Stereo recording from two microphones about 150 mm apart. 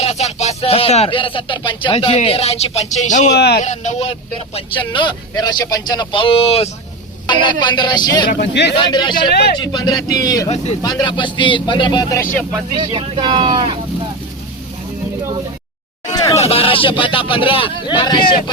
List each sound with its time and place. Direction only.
0.0 s speech: 45° left (ahead or behind)
3.3 s speech: 90° left
3.6 s speech: 55° left (ahead or behind)
4.0 s a man's voice: 40° left (ahead or behind)
9.3 s speech: 90° left
9.6 s speech: 25° left (ahead or behind)
12.7 s speech: 35° right (ahead or behind)
16.1 s a sound: 25° left (ahead or behind)
16.4 s speech: 40° left (ahead or behind)